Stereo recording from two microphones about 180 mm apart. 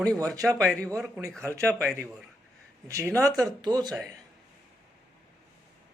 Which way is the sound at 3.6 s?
20° right (ahead or behind).